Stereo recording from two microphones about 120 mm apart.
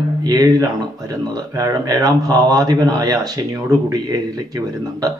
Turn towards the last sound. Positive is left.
turn(degrees=-30)  # may be behind; listen again after turning